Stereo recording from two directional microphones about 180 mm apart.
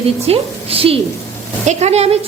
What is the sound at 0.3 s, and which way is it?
A woman's voice, 30° right (ahead or behind).